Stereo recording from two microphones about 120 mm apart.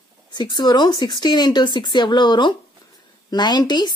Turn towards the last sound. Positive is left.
turn(degrees=35)  # may be behind; listen again after turning